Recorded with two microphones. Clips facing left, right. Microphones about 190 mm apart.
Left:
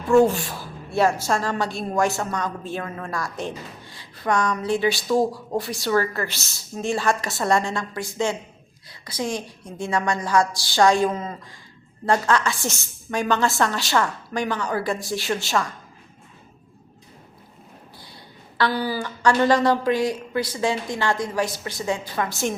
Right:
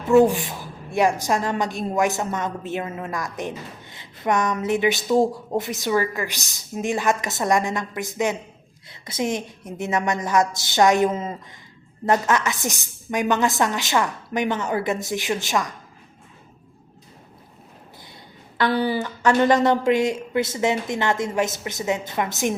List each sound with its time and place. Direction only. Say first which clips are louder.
0.2 s a woman's voice: right 1 dB; 15° right (ahead or behind)
18.5 s a woman's voice: right 2 dB; 20° right (ahead or behind)